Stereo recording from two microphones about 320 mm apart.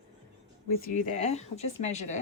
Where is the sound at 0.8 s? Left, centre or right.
Left.